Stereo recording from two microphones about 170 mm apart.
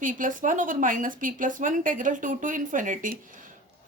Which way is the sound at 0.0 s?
50° right (ahead or behind).